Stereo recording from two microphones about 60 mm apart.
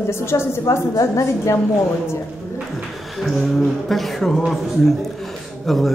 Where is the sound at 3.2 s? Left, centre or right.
Centre.